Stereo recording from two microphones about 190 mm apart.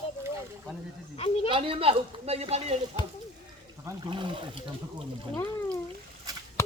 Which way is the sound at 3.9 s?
25° right (ahead or behind).